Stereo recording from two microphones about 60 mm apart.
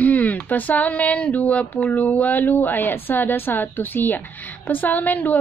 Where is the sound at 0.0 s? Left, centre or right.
Left.